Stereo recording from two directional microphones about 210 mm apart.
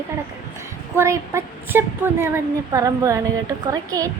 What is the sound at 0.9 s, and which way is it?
A woman's voice, 15° right (ahead or behind).